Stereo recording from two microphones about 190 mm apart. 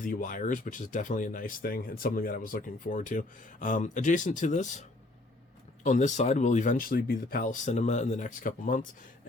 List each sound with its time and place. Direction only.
0.0 s speech: 45° left (ahead or behind)